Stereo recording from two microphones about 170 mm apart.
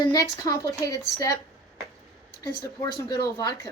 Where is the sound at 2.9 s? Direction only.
25° left (ahead or behind).